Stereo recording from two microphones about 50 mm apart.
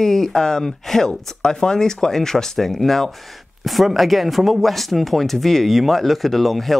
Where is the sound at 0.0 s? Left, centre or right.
Centre.